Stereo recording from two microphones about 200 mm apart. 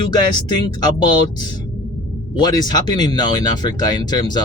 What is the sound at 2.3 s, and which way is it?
Speech, 20° left (ahead or behind).